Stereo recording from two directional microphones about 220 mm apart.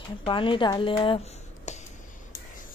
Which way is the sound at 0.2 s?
20° left (ahead or behind).